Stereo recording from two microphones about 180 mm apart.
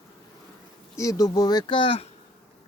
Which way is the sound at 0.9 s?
20° left (ahead or behind).